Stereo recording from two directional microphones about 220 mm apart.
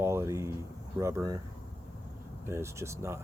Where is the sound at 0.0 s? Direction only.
10° right (ahead or behind).